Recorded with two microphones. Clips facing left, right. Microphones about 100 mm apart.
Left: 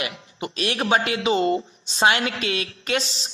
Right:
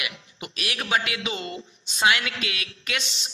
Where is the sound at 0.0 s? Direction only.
35° left (ahead or behind).